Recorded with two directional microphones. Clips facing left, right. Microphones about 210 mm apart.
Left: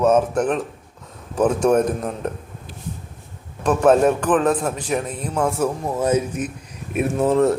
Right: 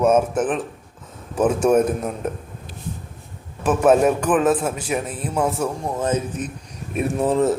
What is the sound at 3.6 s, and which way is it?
A man's voice, 5° right (ahead or behind).